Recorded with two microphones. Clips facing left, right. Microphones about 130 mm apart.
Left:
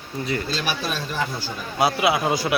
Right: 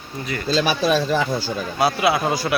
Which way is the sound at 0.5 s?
90° right.